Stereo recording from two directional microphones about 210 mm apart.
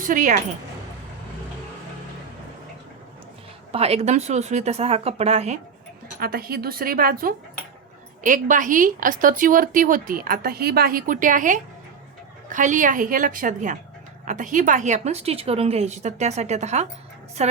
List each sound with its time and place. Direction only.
0.0 s a woman's voice: 40° right (ahead or behind)
3.7 s speech: 30° right (ahead or behind)
6.1 s a woman's voice: 45° right (ahead or behind)